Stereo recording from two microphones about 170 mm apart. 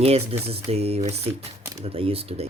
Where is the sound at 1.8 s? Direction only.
35° right (ahead or behind).